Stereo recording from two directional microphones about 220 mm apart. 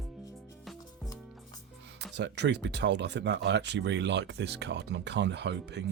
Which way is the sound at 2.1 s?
50° right (ahead or behind).